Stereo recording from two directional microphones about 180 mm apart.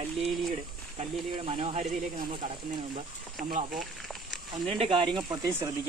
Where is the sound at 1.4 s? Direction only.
30° right (ahead or behind).